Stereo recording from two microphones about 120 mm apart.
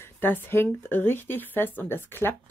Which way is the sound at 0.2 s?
15° left (ahead or behind).